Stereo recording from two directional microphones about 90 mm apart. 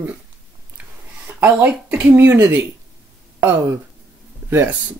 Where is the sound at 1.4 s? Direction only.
20° right (ahead or behind).